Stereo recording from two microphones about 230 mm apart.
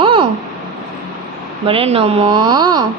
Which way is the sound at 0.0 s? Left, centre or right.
Right.